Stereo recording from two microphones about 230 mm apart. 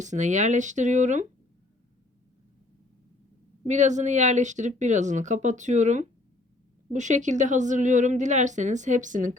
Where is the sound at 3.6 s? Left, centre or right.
Right.